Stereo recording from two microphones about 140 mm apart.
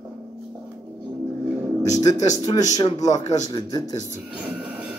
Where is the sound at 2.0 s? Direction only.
25° left (ahead or behind).